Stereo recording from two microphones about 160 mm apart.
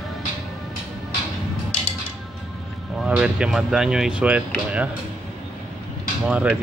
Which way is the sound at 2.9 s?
5° right (ahead or behind).